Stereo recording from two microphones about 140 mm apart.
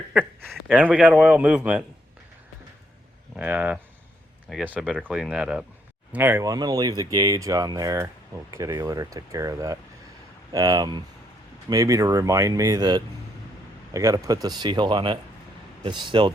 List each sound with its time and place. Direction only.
0.7 s a man's voice: 10° right (ahead or behind)
3.3 s a man's voice: 10° right (ahead or behind)
6.5 s speech: 25° right (ahead or behind)